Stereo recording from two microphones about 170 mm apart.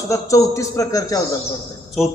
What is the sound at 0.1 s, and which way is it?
A man's voice, 20° left (ahead or behind).